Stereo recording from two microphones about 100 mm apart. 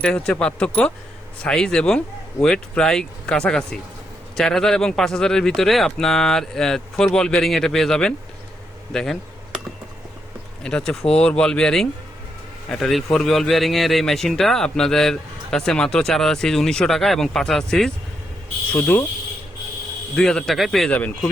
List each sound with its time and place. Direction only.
0.0 s speech: 10° left (ahead or behind)
10.6 s speech: 10° left (ahead or behind)
18.7 s speech: 15° left (ahead or behind)
20.1 s speech: 5° left (ahead or behind)
20.9 s speech: 15° left (ahead or behind)